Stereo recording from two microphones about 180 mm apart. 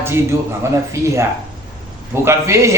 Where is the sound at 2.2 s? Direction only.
15° right (ahead or behind).